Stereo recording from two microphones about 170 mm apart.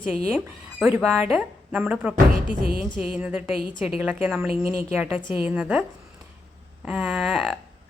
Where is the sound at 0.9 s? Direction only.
Centre (ahead or behind).